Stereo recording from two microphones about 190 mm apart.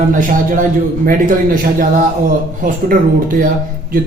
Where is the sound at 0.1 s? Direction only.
45° right (ahead or behind).